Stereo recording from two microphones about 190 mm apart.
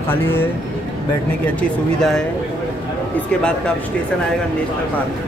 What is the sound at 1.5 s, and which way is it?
Speech, 5° left (ahead or behind).